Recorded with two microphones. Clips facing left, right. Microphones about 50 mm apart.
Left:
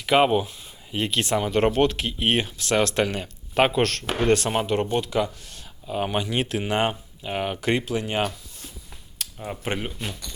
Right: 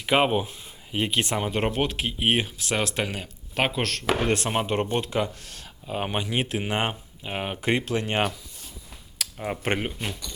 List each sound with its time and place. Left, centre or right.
0.0 s speech: centre
1.6 s speech: centre
3.5 s speech: centre
4.3 s speech: centre
4.6 s speech: right
5.4 s speech: right
6.1 s speech: right
7.9 s speech: right
9.4 s speech: right
9.8 s speech: right